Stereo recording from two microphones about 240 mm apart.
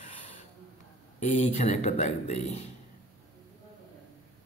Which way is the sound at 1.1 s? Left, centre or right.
Left.